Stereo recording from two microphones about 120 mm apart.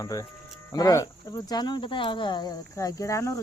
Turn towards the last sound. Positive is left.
turn(degrees=25)  # may be behind; listen again after turning